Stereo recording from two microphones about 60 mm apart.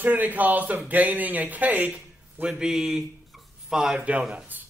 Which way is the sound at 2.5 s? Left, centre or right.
Centre.